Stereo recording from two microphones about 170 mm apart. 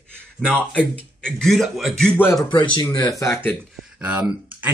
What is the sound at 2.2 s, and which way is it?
Speech, 15° left (ahead or behind).